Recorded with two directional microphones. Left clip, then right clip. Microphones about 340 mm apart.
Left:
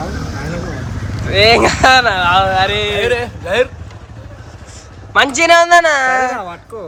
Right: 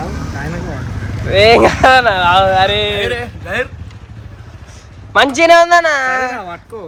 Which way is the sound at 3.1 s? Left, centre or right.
Left.